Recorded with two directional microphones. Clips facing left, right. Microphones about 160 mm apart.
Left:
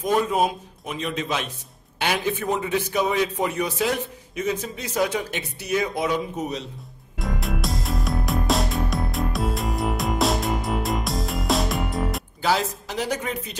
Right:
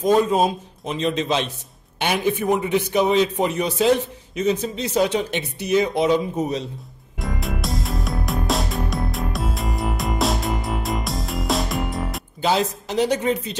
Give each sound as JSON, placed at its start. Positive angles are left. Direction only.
{"t": 0.0, "sound": "a man's voice", "side_deg": -25}
{"t": 7.2, "sound": "music", "side_deg": 0}
{"t": 12.4, "sound": "a man's voice", "side_deg": -20}